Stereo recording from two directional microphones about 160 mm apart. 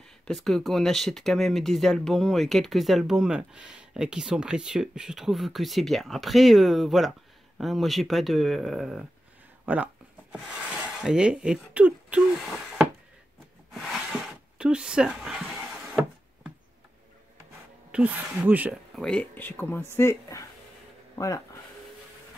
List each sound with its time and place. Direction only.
0.3 s speech: centre (ahead or behind)
13.7 s a sound: 5° right (ahead or behind)
17.9 s speech: 10° right (ahead or behind)
18.9 s speech: 5° left (ahead or behind)